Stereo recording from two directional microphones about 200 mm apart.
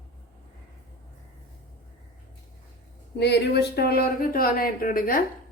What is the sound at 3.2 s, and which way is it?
Speech, 55° left (ahead or behind).